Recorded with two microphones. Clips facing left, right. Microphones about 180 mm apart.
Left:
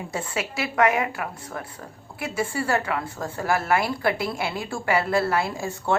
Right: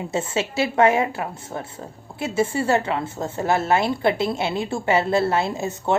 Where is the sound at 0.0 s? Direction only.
25° right (ahead or behind).